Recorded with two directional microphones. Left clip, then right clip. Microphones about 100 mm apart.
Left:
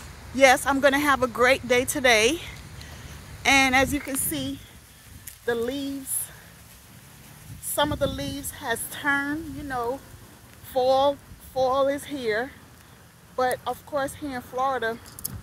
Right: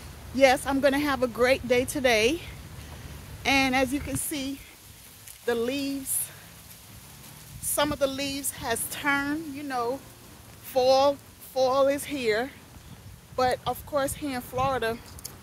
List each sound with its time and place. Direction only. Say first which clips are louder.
0.4 s a woman's voice: left 3 dB; centre (ahead or behind)
4.1 s speech: left 2 dB; 35° left (ahead or behind)
5.4 s a woman's voice: even; 5° right (ahead or behind)
7.7 s a woman's voice: left 1 dB; centre (ahead or behind); by 15.0 s 15° right (ahead or behind)